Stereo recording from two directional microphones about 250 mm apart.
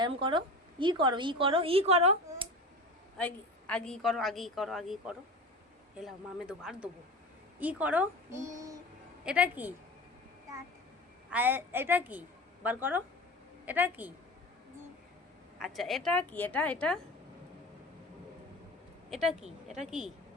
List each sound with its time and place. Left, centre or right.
0.0 s a woman's voice: centre
3.2 s a woman's voice: centre
11.3 s a woman's voice: centre
15.5 s a woman's voice: centre
19.1 s a woman's voice: centre